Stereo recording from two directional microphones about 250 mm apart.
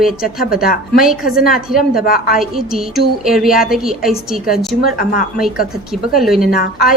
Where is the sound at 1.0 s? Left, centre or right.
Centre.